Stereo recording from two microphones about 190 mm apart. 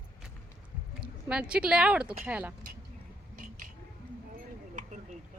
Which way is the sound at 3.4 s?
45° right (ahead or behind).